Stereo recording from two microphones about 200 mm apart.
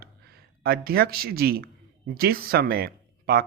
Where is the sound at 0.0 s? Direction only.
50° right (ahead or behind).